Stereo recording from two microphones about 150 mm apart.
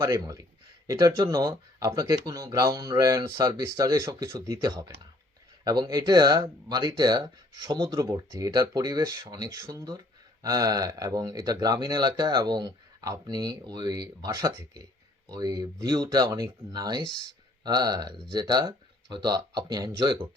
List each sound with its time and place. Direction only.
0.0 s speech: 20° right (ahead or behind)
17.0 s speech: 30° left (ahead or behind)
17.6 s speech: 25° right (ahead or behind)